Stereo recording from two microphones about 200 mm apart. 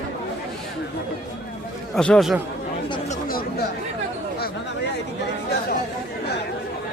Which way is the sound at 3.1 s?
45° left (ahead or behind).